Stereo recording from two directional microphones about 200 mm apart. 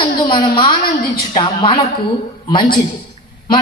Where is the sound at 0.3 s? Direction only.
25° left (ahead or behind).